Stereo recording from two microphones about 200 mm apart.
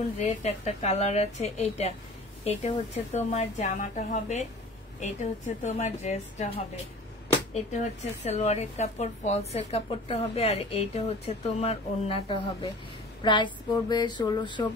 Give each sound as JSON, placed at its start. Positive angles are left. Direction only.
{"t": 0.2, "sound": "speech", "side_deg": 35}
{"t": 5.6, "sound": "speech", "side_deg": 35}
{"t": 13.2, "sound": "a sound", "side_deg": 25}